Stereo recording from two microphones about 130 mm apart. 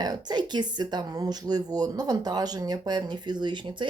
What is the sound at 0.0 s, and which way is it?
Speech, 30° right (ahead or behind).